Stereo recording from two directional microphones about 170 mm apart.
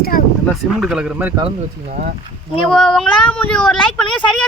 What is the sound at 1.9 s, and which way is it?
Speech, 55° right (ahead or behind).